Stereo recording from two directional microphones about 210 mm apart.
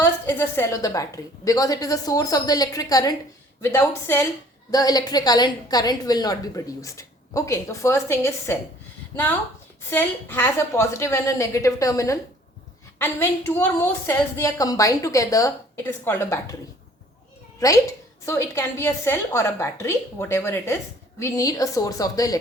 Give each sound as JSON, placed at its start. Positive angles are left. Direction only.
{"t": 0.0, "sound": "a woman's voice", "side_deg": 10}
{"t": 17.6, "sound": "a woman's voice", "side_deg": 15}